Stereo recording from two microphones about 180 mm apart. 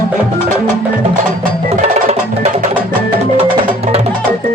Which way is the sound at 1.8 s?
35° right (ahead or behind).